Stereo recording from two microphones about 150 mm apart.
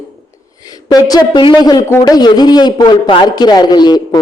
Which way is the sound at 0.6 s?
25° left (ahead or behind).